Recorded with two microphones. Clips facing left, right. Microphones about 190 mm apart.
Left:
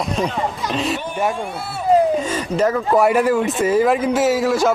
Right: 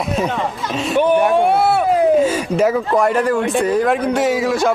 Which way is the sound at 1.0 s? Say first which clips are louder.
Right 9 dB; 65° right (ahead or behind).